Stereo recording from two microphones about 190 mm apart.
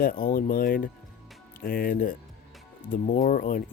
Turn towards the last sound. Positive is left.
turn(degrees=45)  # may be behind; listen again after turning